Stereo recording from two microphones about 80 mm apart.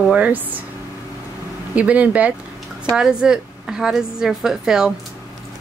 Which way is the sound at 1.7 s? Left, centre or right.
Centre.